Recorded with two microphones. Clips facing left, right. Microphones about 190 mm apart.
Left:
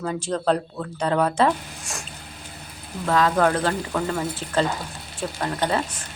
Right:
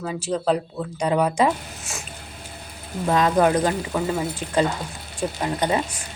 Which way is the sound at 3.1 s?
20° right (ahead or behind).